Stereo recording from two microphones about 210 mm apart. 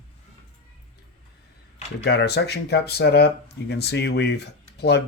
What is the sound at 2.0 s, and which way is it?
Speech, 50° left (ahead or behind).